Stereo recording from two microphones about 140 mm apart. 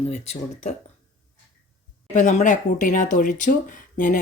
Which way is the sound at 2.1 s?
60° left (ahead or behind).